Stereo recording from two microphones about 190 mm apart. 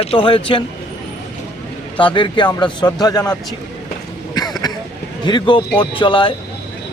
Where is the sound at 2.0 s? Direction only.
25° left (ahead or behind).